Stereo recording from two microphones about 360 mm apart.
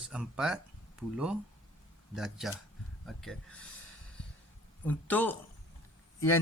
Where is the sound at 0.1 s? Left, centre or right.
Centre.